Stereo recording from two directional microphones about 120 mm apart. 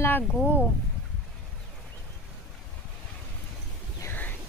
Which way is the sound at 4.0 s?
15° left (ahead or behind).